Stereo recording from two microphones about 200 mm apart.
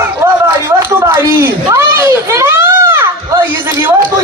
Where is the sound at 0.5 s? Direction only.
10° right (ahead or behind).